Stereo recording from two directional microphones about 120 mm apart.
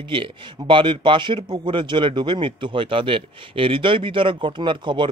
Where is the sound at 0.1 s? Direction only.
45° right (ahead or behind).